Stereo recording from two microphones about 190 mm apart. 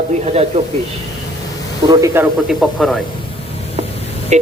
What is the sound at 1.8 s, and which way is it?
Speech, 25° right (ahead or behind).